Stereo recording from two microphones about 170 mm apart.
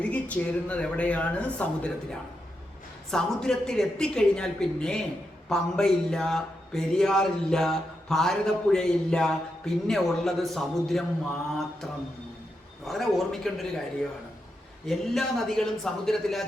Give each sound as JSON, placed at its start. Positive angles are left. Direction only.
{"t": 0.0, "sound": "a man's voice", "side_deg": 10}
{"t": 12.8, "sound": "a man's voice", "side_deg": 0}
{"t": 14.8, "sound": "a man's voice", "side_deg": 0}